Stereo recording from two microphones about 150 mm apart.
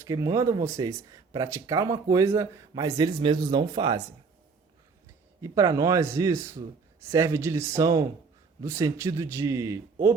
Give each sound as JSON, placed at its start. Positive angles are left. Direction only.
{"t": 0.0, "sound": "speech", "side_deg": -25}
{"t": 5.4, "sound": "speech", "side_deg": -20}